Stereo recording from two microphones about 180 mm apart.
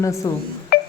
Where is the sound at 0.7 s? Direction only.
60° left (ahead or behind).